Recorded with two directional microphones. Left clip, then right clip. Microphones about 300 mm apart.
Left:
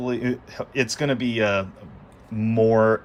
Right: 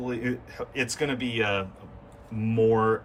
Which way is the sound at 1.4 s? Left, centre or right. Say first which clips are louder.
Left 3 dB; centre.